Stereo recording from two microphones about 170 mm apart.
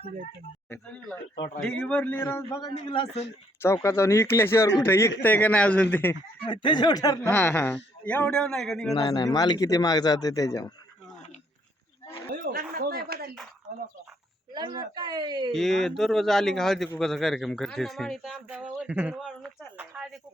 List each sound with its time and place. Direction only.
1.6 s a man's voice: 5° left (ahead or behind)
2.8 s speech: 30° left (ahead or behind)
3.8 s a man's voice: 15° left (ahead or behind)
6.4 s speech: 25° left (ahead or behind)
7.3 s a man's voice: 10° left (ahead or behind)
9.0 s speech: 25° left (ahead or behind)
12.3 s a sound: 55° right (ahead or behind)
12.7 s speech: 60° right (ahead or behind)
14.5 s a woman's voice: 25° right (ahead or behind)
15.5 s speech: centre (ahead or behind)